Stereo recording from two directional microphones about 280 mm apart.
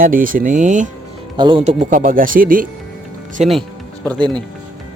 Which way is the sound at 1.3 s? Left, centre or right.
Centre.